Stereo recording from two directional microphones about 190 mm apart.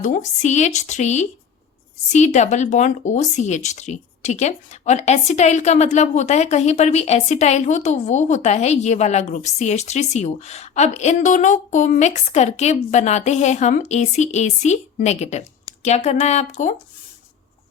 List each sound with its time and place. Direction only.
0.0 s speech: 40° left (ahead or behind)